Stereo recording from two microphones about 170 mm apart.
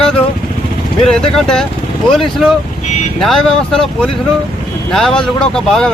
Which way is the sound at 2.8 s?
45° left (ahead or behind).